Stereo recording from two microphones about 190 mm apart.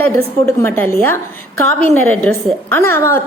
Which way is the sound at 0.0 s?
10° left (ahead or behind).